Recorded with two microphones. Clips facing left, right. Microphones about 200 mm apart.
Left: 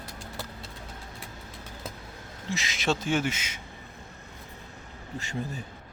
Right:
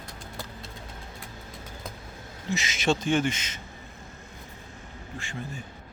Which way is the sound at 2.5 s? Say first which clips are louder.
Right 3 dB; centre (ahead or behind).